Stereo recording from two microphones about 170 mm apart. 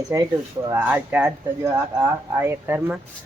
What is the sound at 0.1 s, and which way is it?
Speech, 20° right (ahead or behind).